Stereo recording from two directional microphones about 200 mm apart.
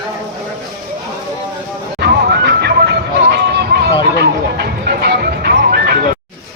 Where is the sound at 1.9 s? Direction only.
55° right (ahead or behind).